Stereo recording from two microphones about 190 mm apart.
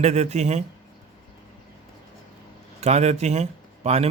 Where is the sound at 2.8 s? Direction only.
35° right (ahead or behind).